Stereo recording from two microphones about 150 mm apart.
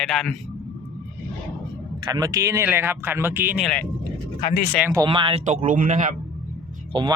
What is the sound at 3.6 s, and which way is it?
Speech, 10° left (ahead or behind).